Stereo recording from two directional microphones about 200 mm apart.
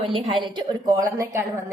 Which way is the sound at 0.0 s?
25° right (ahead or behind).